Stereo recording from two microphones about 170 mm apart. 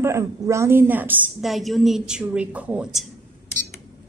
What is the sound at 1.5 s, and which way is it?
A woman's voice, centre (ahead or behind).